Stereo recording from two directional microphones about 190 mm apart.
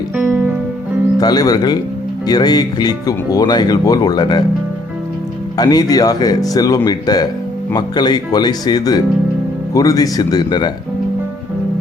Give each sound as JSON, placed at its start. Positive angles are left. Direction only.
{"t": 0.2, "sound": "music", "side_deg": -10}
{"t": 1.2, "sound": "speech", "side_deg": 20}
{"t": 5.5, "sound": "speech", "side_deg": 20}